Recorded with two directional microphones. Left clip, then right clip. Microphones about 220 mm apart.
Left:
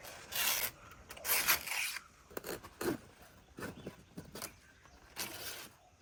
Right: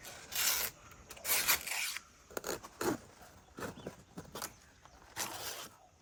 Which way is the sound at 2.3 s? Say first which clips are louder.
Right 3 dB; 5° right (ahead or behind).